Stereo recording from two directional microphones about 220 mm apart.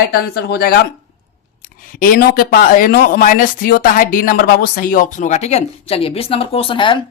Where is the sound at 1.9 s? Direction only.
40° left (ahead or behind); by 7.0 s 20° left (ahead or behind).